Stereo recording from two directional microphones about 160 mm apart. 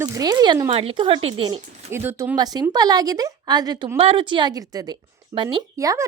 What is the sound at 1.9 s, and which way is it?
Speech, 15° right (ahead or behind).